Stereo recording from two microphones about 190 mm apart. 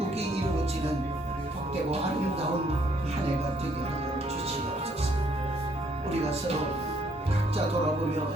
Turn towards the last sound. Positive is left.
turn(degrees=-30)  # may be behind; listen again after turning